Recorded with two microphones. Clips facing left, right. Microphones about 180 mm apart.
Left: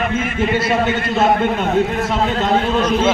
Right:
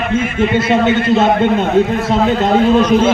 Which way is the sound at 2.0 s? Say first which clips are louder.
Right 5 dB; 35° right (ahead or behind).